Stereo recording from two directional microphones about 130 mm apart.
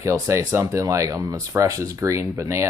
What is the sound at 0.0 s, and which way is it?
Speech, 25° right (ahead or behind).